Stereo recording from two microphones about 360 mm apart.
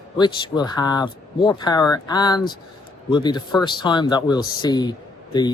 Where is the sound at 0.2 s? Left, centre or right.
Centre.